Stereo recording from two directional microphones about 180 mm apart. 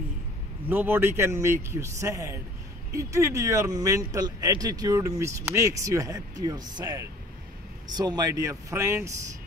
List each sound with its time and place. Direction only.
0.7 s speech: 10° right (ahead or behind)